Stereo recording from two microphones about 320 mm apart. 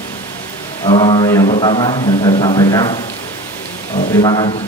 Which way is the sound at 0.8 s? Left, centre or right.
Centre.